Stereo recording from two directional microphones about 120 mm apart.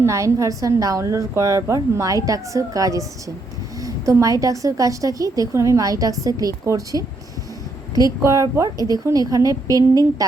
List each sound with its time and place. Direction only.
0.0 s a woman's voice: 25° right (ahead or behind)